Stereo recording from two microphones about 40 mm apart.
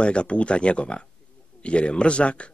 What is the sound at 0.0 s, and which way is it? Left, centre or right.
Speech, left.